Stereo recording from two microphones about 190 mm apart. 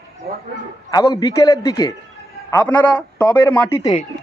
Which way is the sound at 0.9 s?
20° left (ahead or behind).